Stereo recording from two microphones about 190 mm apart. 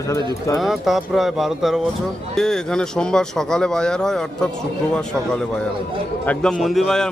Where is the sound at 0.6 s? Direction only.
Centre (ahead or behind).